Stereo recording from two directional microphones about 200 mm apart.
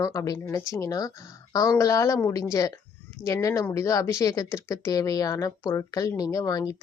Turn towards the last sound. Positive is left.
turn(degrees=20)  # may be behind; listen again after turning